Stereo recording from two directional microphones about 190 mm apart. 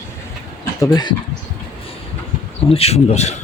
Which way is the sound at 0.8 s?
20° left (ahead or behind).